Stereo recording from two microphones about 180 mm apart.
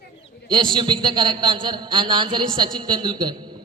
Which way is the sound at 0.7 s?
25° right (ahead or behind).